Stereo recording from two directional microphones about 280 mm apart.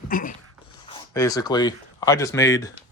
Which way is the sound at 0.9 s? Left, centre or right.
Centre.